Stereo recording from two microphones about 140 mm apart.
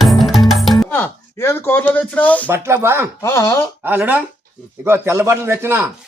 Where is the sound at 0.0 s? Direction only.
Centre (ahead or behind).